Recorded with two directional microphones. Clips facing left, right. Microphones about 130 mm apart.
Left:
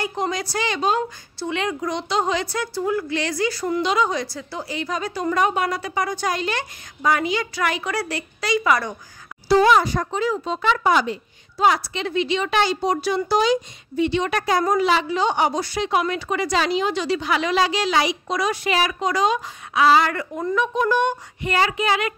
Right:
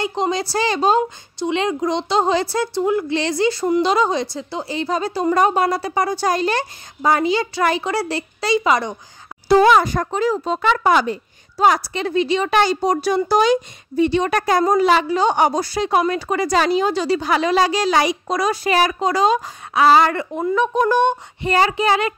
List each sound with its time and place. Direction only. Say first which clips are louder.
0.0 s speech: right 4 dB; 25° right (ahead or behind)
1.4 s a woman's voice: right 5 dB; 25° right (ahead or behind)
9.5 s speech: right 3 dB; 55° right (ahead or behind)
11.5 s speech: right 3 dB; 40° right (ahead or behind)